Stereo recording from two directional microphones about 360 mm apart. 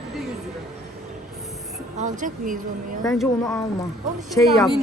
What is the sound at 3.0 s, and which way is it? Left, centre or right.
Speech, centre.